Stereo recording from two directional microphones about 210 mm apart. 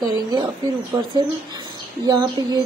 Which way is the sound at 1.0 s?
20° right (ahead or behind).